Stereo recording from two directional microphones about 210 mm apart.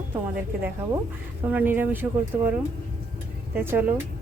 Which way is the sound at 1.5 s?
10° right (ahead or behind).